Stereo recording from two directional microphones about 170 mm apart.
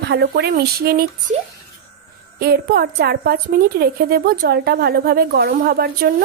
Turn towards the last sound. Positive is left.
turn(degrees=-65)  # may be behind; listen again after turning